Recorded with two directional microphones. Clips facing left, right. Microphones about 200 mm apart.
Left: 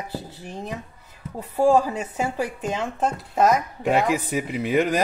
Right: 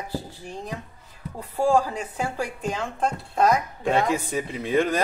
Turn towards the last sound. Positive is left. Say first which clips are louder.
# left 1 dB
turn(degrees=10)  # may be behind; listen again after turning